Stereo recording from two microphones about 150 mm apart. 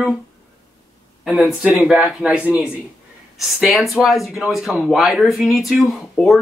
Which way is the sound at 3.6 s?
Centre (ahead or behind).